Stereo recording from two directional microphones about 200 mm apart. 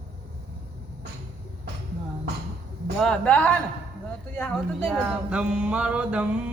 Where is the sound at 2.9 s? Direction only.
5° left (ahead or behind).